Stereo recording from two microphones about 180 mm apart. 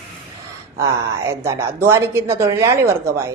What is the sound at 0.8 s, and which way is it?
Speech, 15° right (ahead or behind).